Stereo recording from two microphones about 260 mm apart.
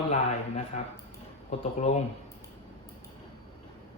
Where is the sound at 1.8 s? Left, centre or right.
Left.